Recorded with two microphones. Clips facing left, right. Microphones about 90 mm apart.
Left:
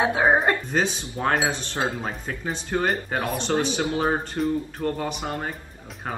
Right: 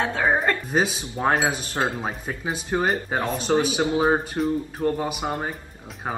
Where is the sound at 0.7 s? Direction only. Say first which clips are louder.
Right 1 dB; 10° right (ahead or behind).